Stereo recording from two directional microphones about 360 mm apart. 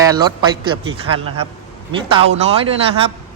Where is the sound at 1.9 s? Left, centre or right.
Centre.